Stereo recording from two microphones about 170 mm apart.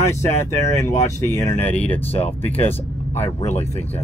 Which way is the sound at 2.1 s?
35° left (ahead or behind).